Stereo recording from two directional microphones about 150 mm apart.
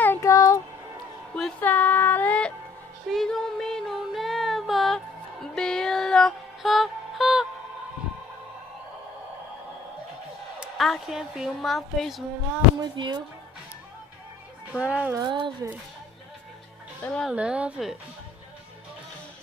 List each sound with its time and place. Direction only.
0.0 s music: 15° left (ahead or behind)
1.3 s music: 10° left (ahead or behind)
3.1 s a sound: 5° left (ahead or behind)
10.6 s a woman's voice: centre (ahead or behind)
12.8 s speech: 30° right (ahead or behind)
14.7 s a woman's voice: 10° right (ahead or behind)
15.1 s speech: 30° right (ahead or behind)
17.0 s speech: 5° left (ahead or behind)
17.3 s a woman's voice: 5° right (ahead or behind)